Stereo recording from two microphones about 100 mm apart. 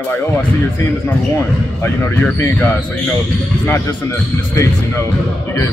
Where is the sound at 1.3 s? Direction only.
30° left (ahead or behind).